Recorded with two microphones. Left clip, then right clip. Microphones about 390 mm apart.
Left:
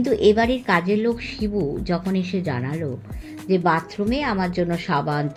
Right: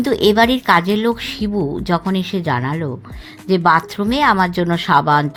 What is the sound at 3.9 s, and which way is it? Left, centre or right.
Speech, right.